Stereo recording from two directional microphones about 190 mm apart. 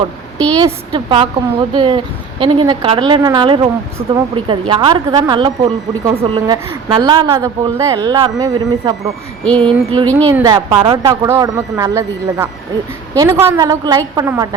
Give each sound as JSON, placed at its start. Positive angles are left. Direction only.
{"t": 0.6, "sound": "a woman's voice", "side_deg": -25}
{"t": 9.4, "sound": "a sound", "side_deg": 5}
{"t": 9.6, "sound": "a woman's voice", "side_deg": -25}